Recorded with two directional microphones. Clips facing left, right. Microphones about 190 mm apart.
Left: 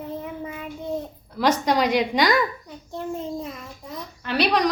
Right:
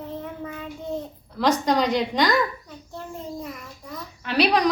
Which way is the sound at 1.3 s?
5° left (ahead or behind).